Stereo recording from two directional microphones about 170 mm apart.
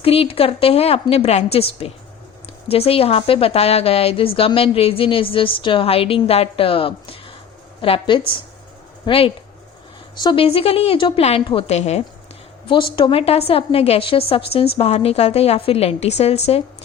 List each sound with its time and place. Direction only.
0.0 s a woman's voice: 35° left (ahead or behind)